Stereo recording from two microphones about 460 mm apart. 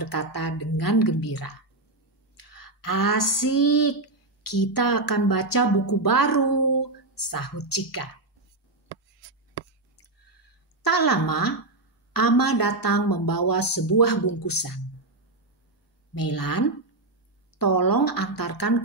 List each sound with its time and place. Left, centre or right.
0.0 s speech: left
2.5 s speech: left
10.8 s speech: left
16.2 s speech: left